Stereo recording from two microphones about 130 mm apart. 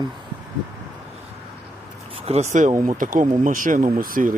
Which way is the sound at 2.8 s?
90° right.